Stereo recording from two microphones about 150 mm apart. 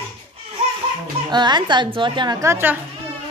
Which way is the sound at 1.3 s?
30° right (ahead or behind).